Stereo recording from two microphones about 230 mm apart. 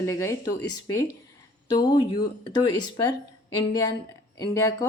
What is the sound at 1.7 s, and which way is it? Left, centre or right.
A woman's voice, centre.